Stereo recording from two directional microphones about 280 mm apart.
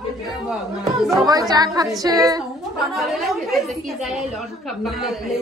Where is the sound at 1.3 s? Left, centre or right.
Centre.